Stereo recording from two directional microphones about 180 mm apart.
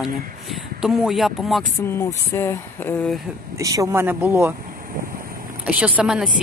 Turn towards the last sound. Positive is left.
turn(degrees=-5)  # may be behind; listen again after turning